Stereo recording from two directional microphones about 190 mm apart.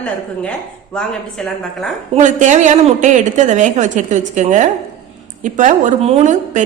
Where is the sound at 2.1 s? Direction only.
40° right (ahead or behind).